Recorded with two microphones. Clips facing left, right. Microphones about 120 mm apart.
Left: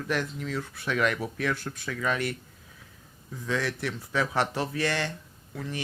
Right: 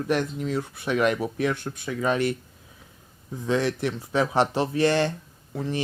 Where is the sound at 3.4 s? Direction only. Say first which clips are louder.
Right 6 dB; 25° right (ahead or behind).